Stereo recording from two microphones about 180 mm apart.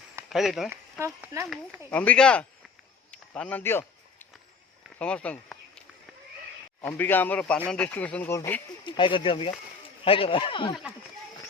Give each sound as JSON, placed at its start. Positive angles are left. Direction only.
{"t": 0.3, "sound": "speech", "side_deg": 0}
{"t": 0.7, "sound": "speech", "side_deg": -15}
{"t": 1.9, "sound": "speech", "side_deg": 10}
{"t": 3.1, "sound": "a sound", "side_deg": 5}
{"t": 6.8, "sound": "speech", "side_deg": 10}
{"t": 8.9, "sound": "speech", "side_deg": 25}